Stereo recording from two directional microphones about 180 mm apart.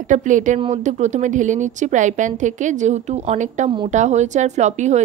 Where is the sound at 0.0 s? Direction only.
45° right (ahead or behind).